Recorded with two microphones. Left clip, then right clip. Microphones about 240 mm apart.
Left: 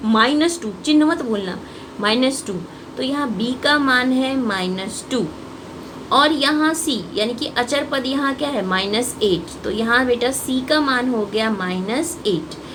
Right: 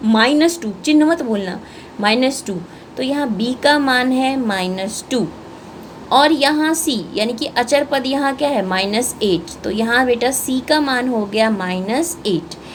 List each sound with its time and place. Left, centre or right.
0.1 s a woman's voice: right